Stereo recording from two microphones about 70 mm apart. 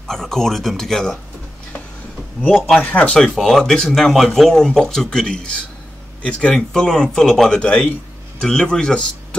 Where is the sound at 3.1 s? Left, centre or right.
Centre.